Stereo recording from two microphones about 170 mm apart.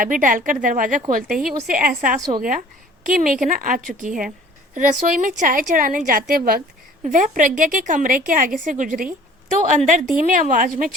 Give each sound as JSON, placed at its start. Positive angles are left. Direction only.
{"t": 0.0, "sound": "a woman's voice", "side_deg": -50}
{"t": 1.3, "sound": "a woman's voice", "side_deg": 0}
{"t": 1.7, "sound": "a woman's voice", "side_deg": -55}